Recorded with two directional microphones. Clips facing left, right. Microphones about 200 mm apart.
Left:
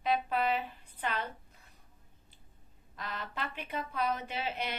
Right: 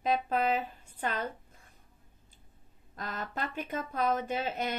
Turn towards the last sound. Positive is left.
turn(degrees=-45)  # may be behind; listen again after turning